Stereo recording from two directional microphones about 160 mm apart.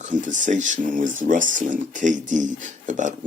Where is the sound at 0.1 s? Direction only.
50° right (ahead or behind).